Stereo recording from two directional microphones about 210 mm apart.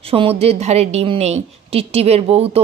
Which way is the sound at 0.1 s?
30° right (ahead or behind).